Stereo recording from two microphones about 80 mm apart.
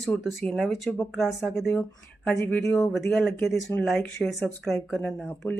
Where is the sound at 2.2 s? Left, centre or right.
Left.